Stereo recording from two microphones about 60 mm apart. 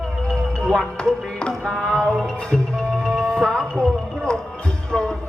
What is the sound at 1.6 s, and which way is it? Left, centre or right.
Music, centre.